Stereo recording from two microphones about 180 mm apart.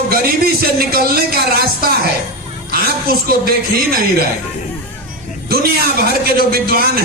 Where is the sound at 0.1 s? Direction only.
55° right (ahead or behind).